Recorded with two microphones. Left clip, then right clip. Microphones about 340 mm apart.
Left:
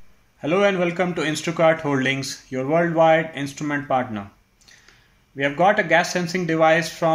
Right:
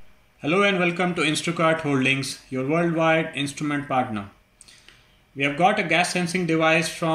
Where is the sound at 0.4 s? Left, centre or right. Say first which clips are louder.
Left 1 dB; left.